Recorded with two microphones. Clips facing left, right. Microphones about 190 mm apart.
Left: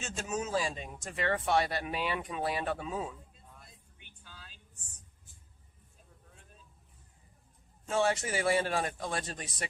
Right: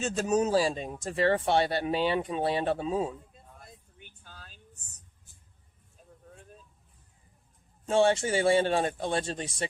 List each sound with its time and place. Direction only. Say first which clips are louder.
0.0 s speech: right 10 dB; 35° right (ahead or behind)
3.3 s vehicle: right 5 dB; 50° right (ahead or behind)
7.9 s speech: right 6 dB; 30° right (ahead or behind)